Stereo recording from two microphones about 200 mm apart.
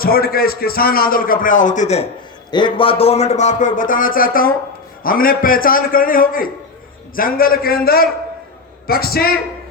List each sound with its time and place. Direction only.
0.0 s a man's voice: 50° left (ahead or behind)
2.5 s a man's voice: 25° left (ahead or behind); by 9.4 s 50° left (ahead or behind)